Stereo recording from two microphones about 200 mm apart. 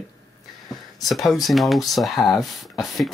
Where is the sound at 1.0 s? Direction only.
Centre (ahead or behind).